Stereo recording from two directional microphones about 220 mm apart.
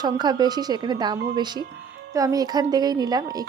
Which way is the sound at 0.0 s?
20° right (ahead or behind).